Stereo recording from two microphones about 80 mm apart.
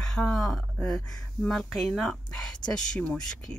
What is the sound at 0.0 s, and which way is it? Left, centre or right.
Speech, centre.